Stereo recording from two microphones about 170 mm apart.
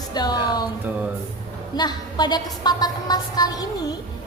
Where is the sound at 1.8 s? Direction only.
25° left (ahead or behind).